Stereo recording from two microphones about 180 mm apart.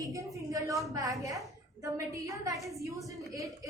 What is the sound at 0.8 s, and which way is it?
A woman's voice, 20° right (ahead or behind).